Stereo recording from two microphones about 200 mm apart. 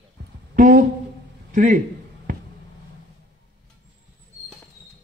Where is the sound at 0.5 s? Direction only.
40° right (ahead or behind).